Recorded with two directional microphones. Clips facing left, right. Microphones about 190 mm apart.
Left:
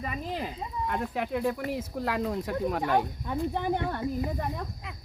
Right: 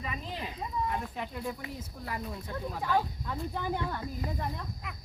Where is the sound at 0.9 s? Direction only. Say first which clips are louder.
Left 5 dB; 75° left (ahead or behind).